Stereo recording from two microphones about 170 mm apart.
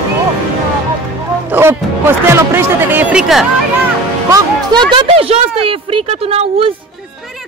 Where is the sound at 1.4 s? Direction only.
15° right (ahead or behind).